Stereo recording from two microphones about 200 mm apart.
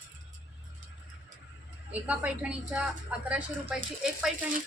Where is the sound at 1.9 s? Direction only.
5° right (ahead or behind).